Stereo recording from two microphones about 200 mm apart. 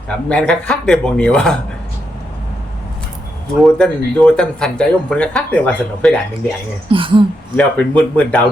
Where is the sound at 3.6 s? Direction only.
Centre (ahead or behind).